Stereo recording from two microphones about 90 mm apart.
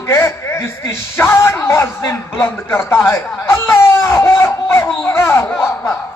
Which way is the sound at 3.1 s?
25° left (ahead or behind).